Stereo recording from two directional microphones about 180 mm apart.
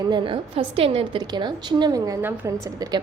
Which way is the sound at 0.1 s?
30° right (ahead or behind).